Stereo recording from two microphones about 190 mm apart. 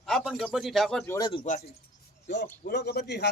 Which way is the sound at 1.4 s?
40° left (ahead or behind).